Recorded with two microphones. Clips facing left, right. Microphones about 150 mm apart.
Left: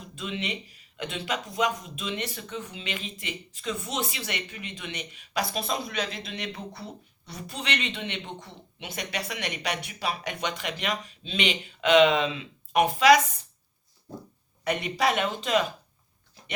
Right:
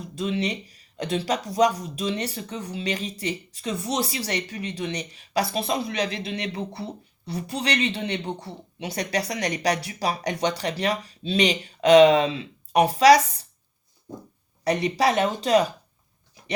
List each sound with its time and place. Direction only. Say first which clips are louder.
0.2 s speech: right 7 dB; 35° right (ahead or behind)
14.6 s speech: right 4 dB; 35° right (ahead or behind)